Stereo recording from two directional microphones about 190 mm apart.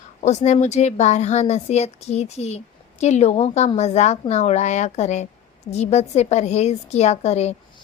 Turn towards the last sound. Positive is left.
turn(degrees=35)  # may be behind; listen again after turning